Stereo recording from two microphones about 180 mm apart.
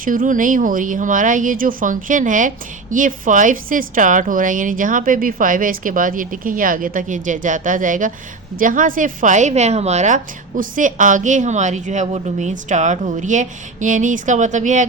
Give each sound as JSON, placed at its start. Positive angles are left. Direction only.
{"t": 0.0, "sound": "a woman's voice", "side_deg": -50}